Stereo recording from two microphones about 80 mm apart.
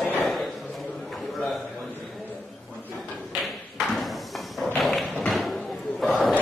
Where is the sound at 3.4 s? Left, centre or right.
Centre.